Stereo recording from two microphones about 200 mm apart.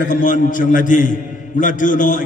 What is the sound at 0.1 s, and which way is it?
A man's voice, 40° left (ahead or behind).